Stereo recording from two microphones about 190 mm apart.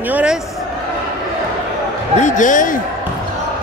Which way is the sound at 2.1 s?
40° left (ahead or behind).